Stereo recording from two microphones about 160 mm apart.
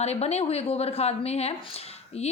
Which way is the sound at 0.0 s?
40° left (ahead or behind).